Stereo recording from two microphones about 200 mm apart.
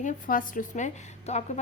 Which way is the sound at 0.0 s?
40° left (ahead or behind).